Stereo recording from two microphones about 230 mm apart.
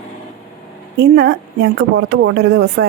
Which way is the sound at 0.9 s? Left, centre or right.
Right.